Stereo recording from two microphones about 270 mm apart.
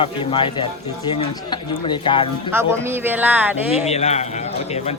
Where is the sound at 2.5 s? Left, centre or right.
Centre.